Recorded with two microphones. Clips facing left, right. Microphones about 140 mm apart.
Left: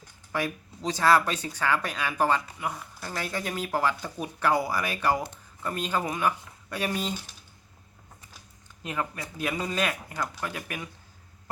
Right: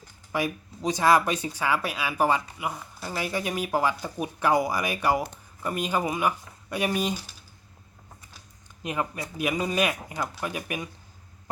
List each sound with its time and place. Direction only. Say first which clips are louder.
0.3 s speech: right 2 dB; 15° right (ahead or behind)
8.8 s speech: right 2 dB; 15° right (ahead or behind)